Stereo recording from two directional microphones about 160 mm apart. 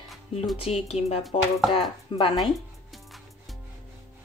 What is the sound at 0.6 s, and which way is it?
Speech, 40° left (ahead or behind).